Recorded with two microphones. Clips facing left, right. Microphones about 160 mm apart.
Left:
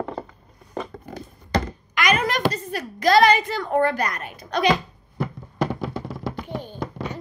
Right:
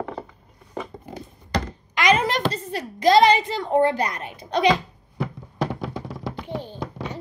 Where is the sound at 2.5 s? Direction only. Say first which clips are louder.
Even; 25° right (ahead or behind).